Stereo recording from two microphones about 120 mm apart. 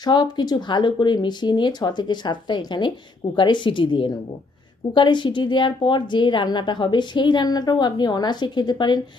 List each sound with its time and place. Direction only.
0.0 s a woman's voice: 35° left (ahead or behind)